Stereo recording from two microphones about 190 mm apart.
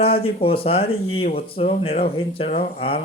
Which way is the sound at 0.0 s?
30° left (ahead or behind).